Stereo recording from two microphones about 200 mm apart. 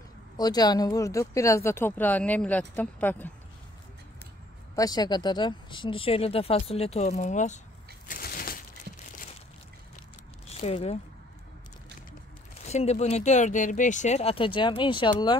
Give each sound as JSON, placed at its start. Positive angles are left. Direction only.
{"t": 0.4, "sound": "speech", "side_deg": 20}
{"t": 4.7, "sound": "speech", "side_deg": 20}
{"t": 8.1, "sound": "a sound", "side_deg": 45}
{"t": 10.5, "sound": "speech", "side_deg": 30}
{"t": 12.6, "sound": "speech", "side_deg": 35}